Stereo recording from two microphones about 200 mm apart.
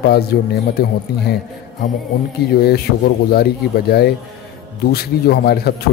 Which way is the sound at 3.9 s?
55° left (ahead or behind).